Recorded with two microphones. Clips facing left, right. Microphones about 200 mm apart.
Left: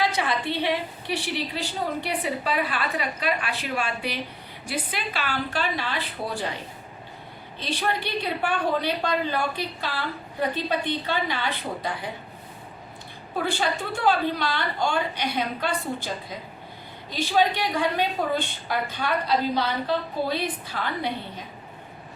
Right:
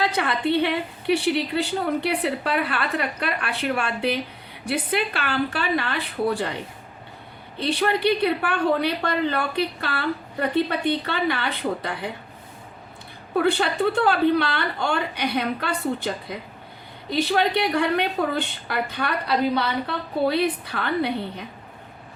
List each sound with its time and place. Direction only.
0.0 s a woman's voice: 60° right (ahead or behind)
7.6 s a woman's voice: 60° right (ahead or behind)
13.3 s a woman's voice: 60° right (ahead or behind)
17.2 s a woman's voice: 60° right (ahead or behind)